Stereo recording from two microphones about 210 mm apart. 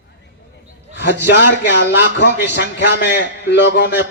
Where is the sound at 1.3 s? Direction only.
55° left (ahead or behind).